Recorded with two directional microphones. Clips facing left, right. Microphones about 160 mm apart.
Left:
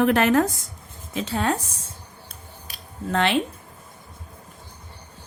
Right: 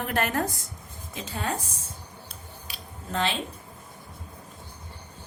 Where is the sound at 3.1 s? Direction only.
70° left (ahead or behind).